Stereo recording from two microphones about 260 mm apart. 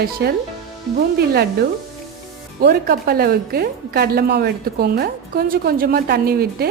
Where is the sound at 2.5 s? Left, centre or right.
Right.